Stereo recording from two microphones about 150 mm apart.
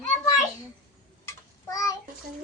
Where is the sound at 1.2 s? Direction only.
20° left (ahead or behind).